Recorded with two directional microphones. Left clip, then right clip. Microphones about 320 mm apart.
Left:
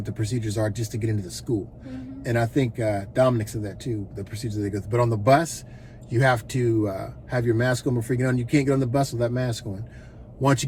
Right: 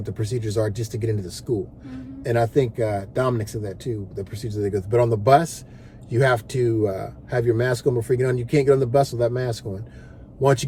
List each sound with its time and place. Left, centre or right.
0.0 s speech: centre